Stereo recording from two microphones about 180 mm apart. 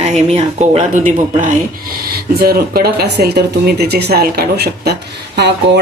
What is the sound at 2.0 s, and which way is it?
Speech, 55° right (ahead or behind).